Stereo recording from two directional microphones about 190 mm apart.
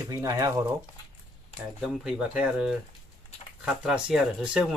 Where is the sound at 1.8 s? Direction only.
5° right (ahead or behind).